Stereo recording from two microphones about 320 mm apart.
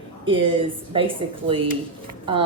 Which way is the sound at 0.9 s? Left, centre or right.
Centre.